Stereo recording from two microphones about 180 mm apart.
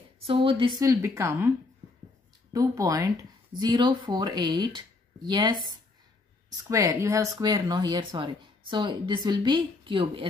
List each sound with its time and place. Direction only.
0.3 s speech: 30° right (ahead or behind)
2.5 s speech: 20° right (ahead or behind)